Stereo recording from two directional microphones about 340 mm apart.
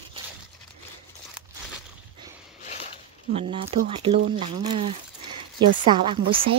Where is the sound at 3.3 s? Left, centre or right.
Centre.